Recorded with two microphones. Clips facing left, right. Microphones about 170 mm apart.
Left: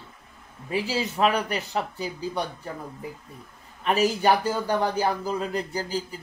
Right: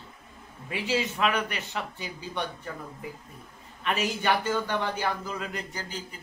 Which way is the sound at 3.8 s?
35° left (ahead or behind).